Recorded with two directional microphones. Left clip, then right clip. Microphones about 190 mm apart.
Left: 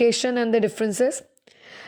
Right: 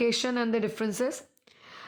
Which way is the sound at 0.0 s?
25° left (ahead or behind).